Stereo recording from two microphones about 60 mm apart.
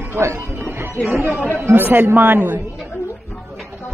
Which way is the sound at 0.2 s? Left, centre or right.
Right.